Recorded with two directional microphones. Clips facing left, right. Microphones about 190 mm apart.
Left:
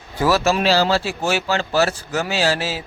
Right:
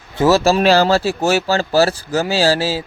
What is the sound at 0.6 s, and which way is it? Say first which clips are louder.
Speech: right 5 dB; 50° right (ahead or behind).